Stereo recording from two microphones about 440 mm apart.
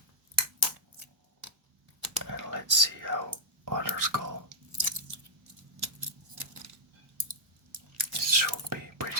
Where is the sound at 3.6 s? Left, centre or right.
Right.